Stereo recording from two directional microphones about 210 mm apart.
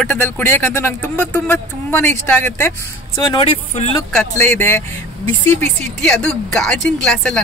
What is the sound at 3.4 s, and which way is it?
Speech, 25° left (ahead or behind).